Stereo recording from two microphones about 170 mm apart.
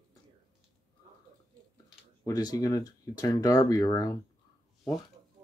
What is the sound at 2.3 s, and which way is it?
Speech, 20° left (ahead or behind).